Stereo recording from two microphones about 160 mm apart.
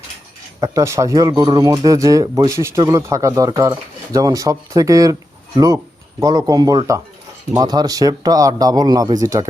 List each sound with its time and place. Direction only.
0.6 s speech: 20° right (ahead or behind)